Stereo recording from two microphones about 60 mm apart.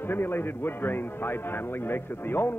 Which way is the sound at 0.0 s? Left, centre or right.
Left.